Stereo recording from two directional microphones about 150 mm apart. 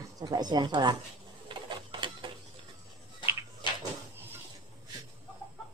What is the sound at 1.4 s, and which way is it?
Printer, 30° right (ahead or behind).